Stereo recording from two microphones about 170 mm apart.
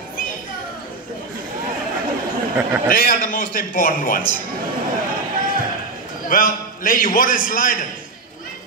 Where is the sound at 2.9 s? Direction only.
55° left (ahead or behind).